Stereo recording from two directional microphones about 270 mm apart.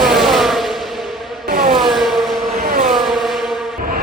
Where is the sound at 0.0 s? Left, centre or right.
Centre.